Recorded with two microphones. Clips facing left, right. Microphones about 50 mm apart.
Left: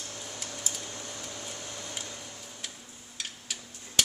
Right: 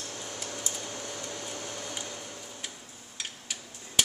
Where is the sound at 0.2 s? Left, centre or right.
Centre.